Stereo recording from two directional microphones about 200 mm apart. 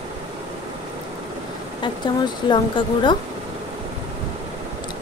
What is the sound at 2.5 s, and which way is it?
Speech, 25° left (ahead or behind).